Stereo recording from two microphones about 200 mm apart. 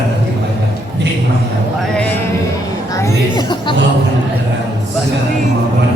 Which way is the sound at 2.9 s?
20° left (ahead or behind).